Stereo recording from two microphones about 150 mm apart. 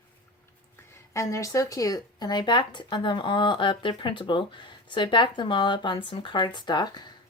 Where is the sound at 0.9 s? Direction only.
20° left (ahead or behind).